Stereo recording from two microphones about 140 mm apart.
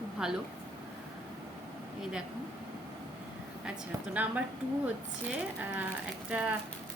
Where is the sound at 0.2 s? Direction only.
5° right (ahead or behind).